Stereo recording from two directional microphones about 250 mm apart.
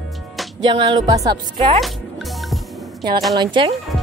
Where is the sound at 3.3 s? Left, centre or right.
Centre.